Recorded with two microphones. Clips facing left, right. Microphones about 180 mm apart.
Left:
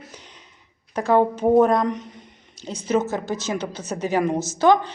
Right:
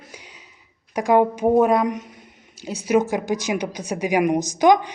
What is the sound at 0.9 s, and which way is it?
A man's voice, 15° right (ahead or behind).